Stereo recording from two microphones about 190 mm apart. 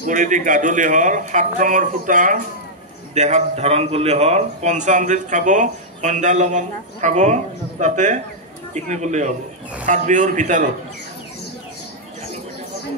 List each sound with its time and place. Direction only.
0.0 s a man's voice: 40° right (ahead or behind)